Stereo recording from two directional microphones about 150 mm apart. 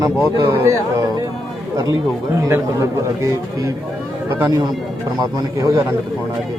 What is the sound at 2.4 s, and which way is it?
A man's voice, 20° right (ahead or behind).